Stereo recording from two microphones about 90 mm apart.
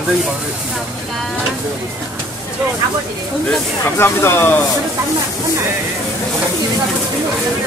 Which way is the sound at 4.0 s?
25° left (ahead or behind).